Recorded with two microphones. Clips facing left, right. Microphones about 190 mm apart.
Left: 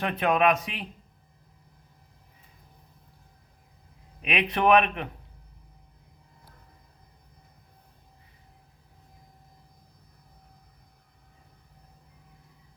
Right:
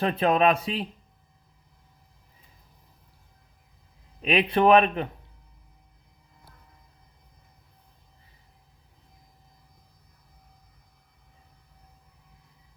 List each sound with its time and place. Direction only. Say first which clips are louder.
0.0 s speech: right 2 dB; 30° right (ahead or behind)
4.2 s speech: right 4 dB; 30° right (ahead or behind)